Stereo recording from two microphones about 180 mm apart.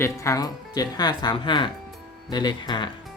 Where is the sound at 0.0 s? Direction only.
15° left (ahead or behind).